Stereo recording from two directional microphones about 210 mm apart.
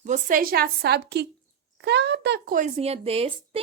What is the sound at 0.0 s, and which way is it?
A woman's voice, 35° right (ahead or behind).